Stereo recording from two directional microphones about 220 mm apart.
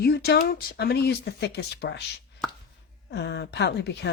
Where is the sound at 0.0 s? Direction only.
45° left (ahead or behind).